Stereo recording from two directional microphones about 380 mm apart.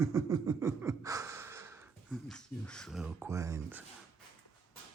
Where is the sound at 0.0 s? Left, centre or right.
Centre.